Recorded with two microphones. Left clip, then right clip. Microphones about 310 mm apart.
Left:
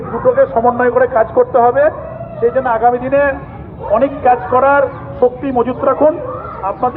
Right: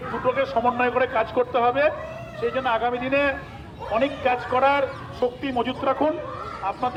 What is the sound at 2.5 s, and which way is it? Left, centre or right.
A man's voice, right.